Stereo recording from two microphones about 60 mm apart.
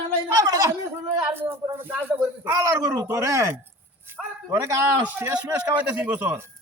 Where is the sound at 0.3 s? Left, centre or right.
Right.